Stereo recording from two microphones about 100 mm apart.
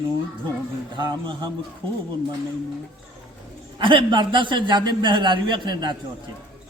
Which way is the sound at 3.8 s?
55° right (ahead or behind).